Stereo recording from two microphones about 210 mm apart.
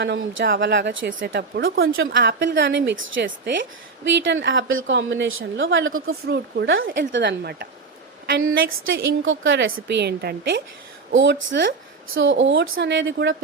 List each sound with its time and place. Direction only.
0.0 s a woman's voice: 55° right (ahead or behind); by 6.1 s 70° right (ahead or behind)
6.2 s a woman's voice: 55° right (ahead or behind)
8.3 s a woman's voice: 70° right (ahead or behind); by 10.6 s 50° right (ahead or behind)
11.1 s a woman's voice: 65° right (ahead or behind)